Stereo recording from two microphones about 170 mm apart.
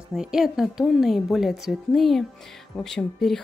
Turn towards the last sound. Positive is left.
turn(degrees=0)  # may be behind; listen again after turning